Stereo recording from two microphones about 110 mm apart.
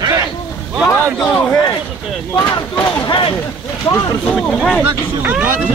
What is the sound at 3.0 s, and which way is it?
Speech, 45° left (ahead or behind).